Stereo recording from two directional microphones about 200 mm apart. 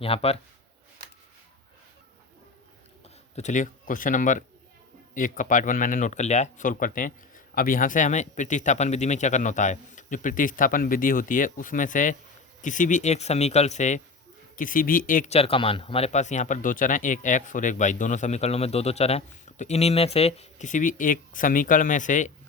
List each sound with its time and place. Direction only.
0.0 s speech: 30° left (ahead or behind)
3.3 s speech: 35° left (ahead or behind)